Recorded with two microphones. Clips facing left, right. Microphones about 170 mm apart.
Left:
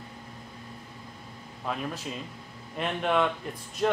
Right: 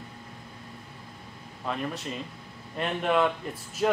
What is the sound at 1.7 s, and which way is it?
A man's voice, centre (ahead or behind).